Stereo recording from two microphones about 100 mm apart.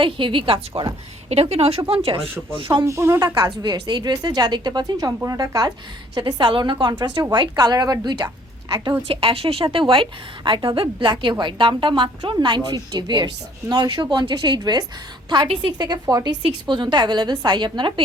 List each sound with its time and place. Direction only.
0.0 s a woman's voice: 60° right (ahead or behind)
1.3 s a woman's voice: 90° right; by 2.8 s 60° right (ahead or behind)
2.8 s speech: 30° right (ahead or behind)
3.3 s a woman's voice: 45° right (ahead or behind)
9.0 s speech: 70° right (ahead or behind)
9.7 s a woman's voice: 60° right (ahead or behind); by 16.3 s 40° right (ahead or behind)
16.4 s a woman's voice: 50° right (ahead or behind)